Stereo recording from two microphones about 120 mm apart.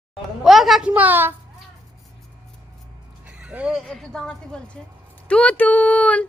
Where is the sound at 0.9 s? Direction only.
15° right (ahead or behind).